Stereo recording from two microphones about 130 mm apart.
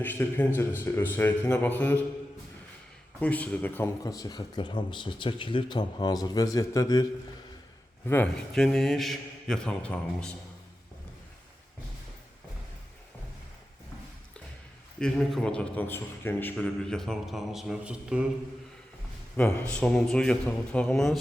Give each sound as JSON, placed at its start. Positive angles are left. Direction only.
{"t": 0.0, "sound": "a man's voice", "side_deg": 15}
{"t": 3.2, "sound": "a man's voice", "side_deg": 10}
{"t": 4.0, "sound": "speech", "side_deg": 30}
{"t": 8.0, "sound": "a man's voice", "side_deg": 15}
{"t": 8.5, "sound": "a man's voice", "side_deg": 5}
{"t": 14.9, "sound": "a man's voice", "side_deg": 5}
{"t": 19.4, "sound": "a man's voice", "side_deg": 10}